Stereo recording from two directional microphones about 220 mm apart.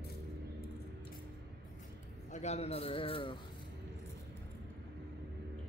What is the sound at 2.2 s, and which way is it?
A man's voice, 30° left (ahead or behind).